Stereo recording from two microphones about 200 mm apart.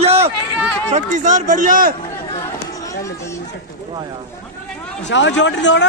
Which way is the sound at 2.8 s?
15° left (ahead or behind).